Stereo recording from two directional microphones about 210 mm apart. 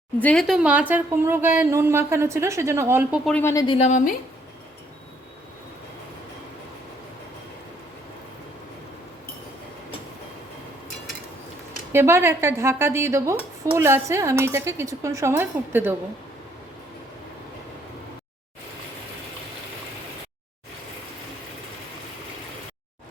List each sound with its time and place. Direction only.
0.2 s speech: 5° left (ahead or behind)
3.2 s speech: 10° left (ahead or behind)
3.8 s a woman's voice: 35° left (ahead or behind)
11.9 s speech: 10° right (ahead or behind)